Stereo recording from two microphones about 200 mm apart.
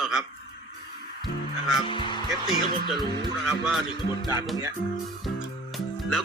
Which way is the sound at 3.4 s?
Centre (ahead or behind).